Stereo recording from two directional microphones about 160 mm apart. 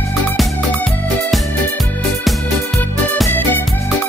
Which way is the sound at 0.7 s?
Centre (ahead or behind).